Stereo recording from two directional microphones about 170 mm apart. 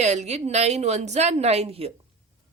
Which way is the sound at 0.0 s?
40° right (ahead or behind).